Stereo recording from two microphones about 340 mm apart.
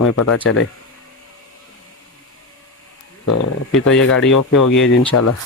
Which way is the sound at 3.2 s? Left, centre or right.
Left.